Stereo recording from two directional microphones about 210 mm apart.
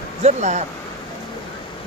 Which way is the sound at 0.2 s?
35° right (ahead or behind).